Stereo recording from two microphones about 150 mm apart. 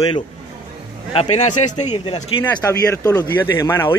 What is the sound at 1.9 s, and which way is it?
Speech, 35° left (ahead or behind).